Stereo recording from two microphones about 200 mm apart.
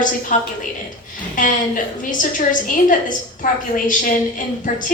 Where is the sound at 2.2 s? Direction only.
40° left (ahead or behind).